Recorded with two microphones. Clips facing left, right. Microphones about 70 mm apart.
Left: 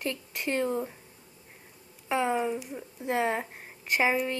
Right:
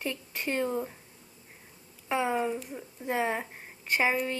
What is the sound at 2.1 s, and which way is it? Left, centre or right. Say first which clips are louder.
Speech: left 1 dB; centre.